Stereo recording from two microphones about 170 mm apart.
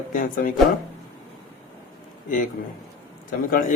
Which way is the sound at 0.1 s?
55° left (ahead or behind).